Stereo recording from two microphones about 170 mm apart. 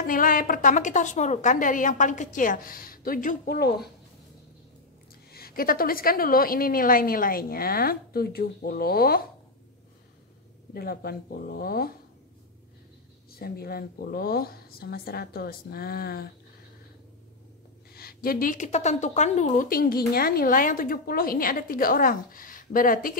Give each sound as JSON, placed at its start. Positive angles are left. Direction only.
{"t": 0.0, "sound": "a woman's voice", "side_deg": 55}
{"t": 5.3, "sound": "a woman's voice", "side_deg": 60}
{"t": 10.7, "sound": "a woman's voice", "side_deg": 65}
{"t": 13.4, "sound": "a woman's voice", "side_deg": 60}
{"t": 17.9, "sound": "a woman's voice", "side_deg": 60}